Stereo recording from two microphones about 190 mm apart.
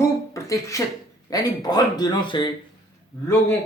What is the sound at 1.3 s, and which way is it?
Speech, 20° left (ahead or behind).